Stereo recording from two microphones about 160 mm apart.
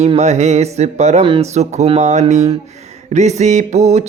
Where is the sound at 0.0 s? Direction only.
45° right (ahead or behind).